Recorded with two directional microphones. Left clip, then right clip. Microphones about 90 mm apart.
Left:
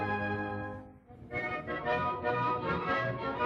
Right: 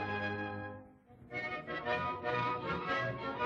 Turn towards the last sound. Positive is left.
turn(degrees=-15)  # may be behind; listen again after turning